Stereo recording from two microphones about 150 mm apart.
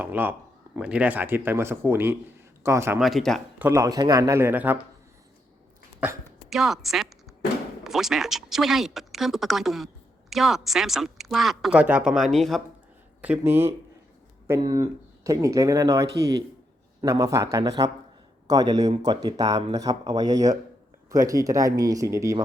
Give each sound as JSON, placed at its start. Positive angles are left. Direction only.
{"t": 0.0, "sound": "speech", "side_deg": -15}
{"t": 3.0, "sound": "speech", "side_deg": 0}
{"t": 3.6, "sound": "speech", "side_deg": -20}
{"t": 6.0, "sound": "speech", "side_deg": -10}
{"t": 13.2, "sound": "speech", "side_deg": -10}